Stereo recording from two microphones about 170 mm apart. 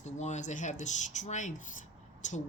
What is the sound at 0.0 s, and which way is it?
Speech, 45° left (ahead or behind).